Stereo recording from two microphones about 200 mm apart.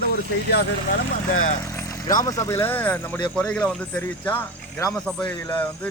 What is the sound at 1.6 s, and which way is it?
Speech, 15° left (ahead or behind).